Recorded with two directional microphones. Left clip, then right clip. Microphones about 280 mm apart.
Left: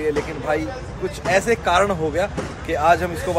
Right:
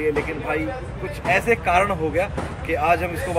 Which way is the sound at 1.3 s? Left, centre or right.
Centre.